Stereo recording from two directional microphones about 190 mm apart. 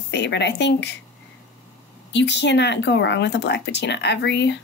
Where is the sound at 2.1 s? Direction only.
65° left (ahead or behind).